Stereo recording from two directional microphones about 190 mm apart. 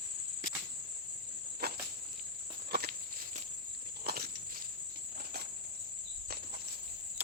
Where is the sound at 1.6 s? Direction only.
55° right (ahead or behind).